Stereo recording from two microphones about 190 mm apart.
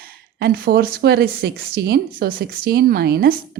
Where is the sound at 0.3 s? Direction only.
55° right (ahead or behind).